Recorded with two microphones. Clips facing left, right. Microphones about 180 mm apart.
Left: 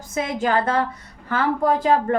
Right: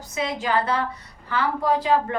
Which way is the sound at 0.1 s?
50° left (ahead or behind).